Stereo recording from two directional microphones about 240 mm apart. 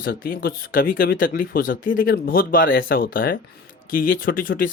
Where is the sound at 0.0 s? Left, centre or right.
Left.